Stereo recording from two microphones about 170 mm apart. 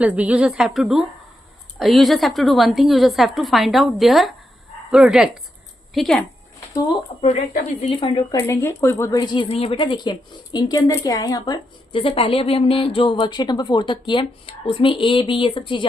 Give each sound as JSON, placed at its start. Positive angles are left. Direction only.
{"t": 0.0, "sound": "a woman's voice", "side_deg": -10}
{"t": 7.2, "sound": "speech", "side_deg": 40}